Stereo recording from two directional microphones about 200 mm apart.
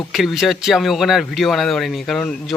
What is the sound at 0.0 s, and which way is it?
Speech, centre (ahead or behind).